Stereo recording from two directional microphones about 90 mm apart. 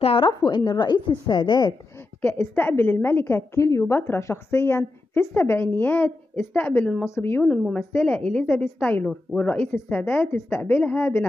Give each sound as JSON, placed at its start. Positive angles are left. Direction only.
{"t": 0.0, "sound": "a woman's voice", "side_deg": 90}
{"t": 0.5, "sound": "a woman's voice", "side_deg": 55}
{"t": 2.3, "sound": "a woman's voice", "side_deg": 25}